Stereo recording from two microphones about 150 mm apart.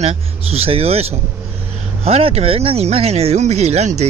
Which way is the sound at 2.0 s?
45° right (ahead or behind).